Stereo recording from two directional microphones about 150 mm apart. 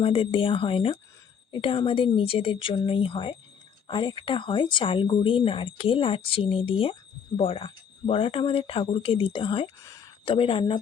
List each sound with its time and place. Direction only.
0.0 s speech: 35° left (ahead or behind)
9.8 s a sound: 20° left (ahead or behind)
10.2 s speech: 35° left (ahead or behind)